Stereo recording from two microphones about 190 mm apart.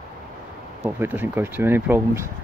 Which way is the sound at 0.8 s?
10° right (ahead or behind).